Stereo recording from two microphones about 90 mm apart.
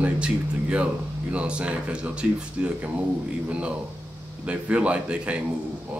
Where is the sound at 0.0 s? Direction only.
15° right (ahead or behind).